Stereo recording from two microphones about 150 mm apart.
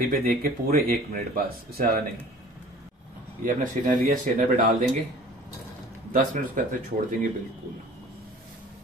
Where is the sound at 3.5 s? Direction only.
60° right (ahead or behind).